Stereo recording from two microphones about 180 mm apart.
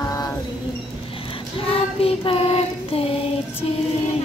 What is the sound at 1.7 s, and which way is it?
Child singing, 30° left (ahead or behind).